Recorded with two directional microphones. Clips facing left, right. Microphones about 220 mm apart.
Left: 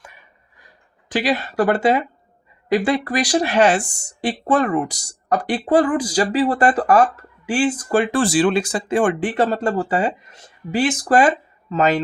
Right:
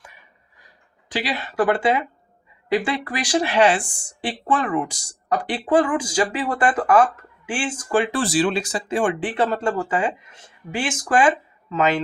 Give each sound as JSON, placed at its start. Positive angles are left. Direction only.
{"t": 1.1, "sound": "speech", "side_deg": 45}